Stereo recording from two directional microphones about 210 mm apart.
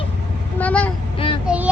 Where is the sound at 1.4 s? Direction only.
5° right (ahead or behind).